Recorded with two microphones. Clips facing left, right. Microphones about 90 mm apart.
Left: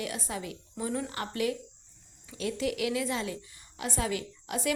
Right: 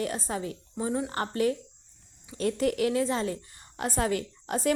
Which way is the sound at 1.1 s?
40° right (ahead or behind).